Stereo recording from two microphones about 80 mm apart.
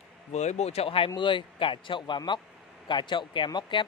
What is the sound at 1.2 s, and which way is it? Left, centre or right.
A man's voice, left.